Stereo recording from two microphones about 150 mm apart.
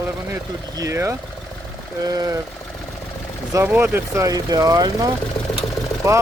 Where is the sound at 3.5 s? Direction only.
15° right (ahead or behind).